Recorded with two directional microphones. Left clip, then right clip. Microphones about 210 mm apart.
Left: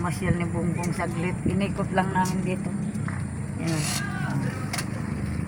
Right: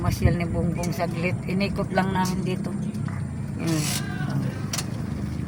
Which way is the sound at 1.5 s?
10° right (ahead or behind).